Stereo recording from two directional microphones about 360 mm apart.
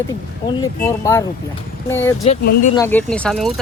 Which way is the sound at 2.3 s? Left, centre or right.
Centre.